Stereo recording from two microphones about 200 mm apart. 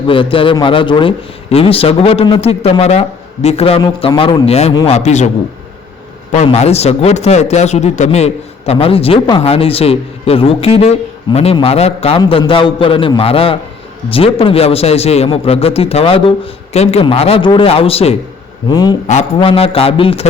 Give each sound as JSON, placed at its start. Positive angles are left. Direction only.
{"t": 0.1, "sound": "a man's voice", "side_deg": 25}
{"t": 6.3, "sound": "a man's voice", "side_deg": 35}
{"t": 19.0, "sound": "a man's voice", "side_deg": 30}